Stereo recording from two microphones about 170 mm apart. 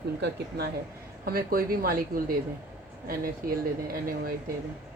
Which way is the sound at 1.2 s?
60° right (ahead or behind).